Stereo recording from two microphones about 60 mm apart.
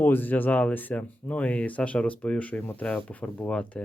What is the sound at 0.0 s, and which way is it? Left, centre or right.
Speech, left.